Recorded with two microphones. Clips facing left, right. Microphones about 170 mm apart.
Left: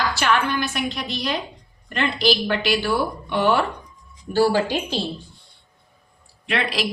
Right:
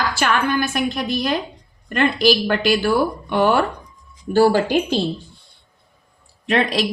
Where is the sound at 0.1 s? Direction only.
50° right (ahead or behind).